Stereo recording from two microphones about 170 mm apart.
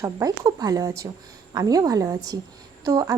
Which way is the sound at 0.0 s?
20° right (ahead or behind).